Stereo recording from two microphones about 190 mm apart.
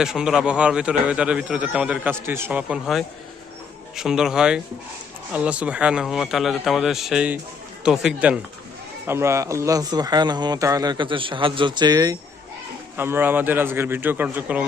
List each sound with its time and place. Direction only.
0.0 s a man's voice: 5° right (ahead or behind)